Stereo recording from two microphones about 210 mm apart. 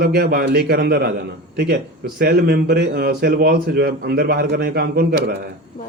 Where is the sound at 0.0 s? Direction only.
50° right (ahead or behind).